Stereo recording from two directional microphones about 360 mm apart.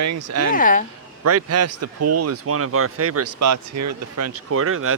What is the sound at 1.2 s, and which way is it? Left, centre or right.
Speech, right.